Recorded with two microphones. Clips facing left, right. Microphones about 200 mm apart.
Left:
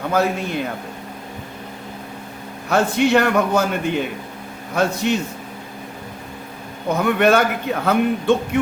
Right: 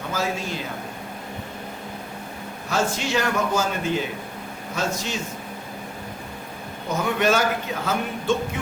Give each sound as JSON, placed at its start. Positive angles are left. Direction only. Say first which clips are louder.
{"t": 0.1, "sound": "a man's voice", "louder": "left 7 dB", "side_deg": 60}
{"t": 2.6, "sound": "a man's voice", "louder": "left 8 dB", "side_deg": 60}
{"t": 6.9, "sound": "a man's voice", "louder": "left 5 dB", "side_deg": 60}